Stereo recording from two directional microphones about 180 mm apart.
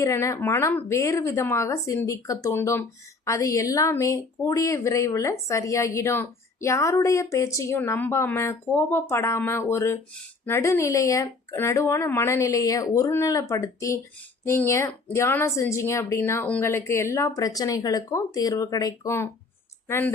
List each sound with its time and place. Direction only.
0.0 s a woman's voice: 15° left (ahead or behind)